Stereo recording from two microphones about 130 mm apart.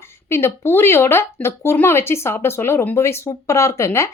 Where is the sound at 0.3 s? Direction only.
20° left (ahead or behind).